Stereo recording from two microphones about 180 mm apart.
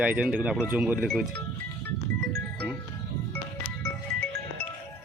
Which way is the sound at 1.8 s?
10° left (ahead or behind).